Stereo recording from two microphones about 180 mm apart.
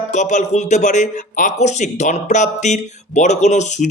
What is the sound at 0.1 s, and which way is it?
Speech, 40° left (ahead or behind).